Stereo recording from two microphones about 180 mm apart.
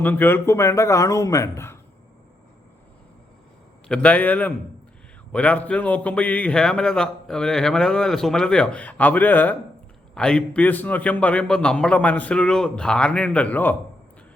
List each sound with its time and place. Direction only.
0.0 s a man's voice: 10° left (ahead or behind)
3.8 s a man's voice: 5° left (ahead or behind)